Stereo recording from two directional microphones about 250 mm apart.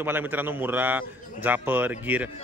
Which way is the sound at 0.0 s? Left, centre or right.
Centre.